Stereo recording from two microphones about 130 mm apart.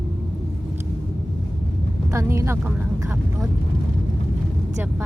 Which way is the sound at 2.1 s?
25° right (ahead or behind).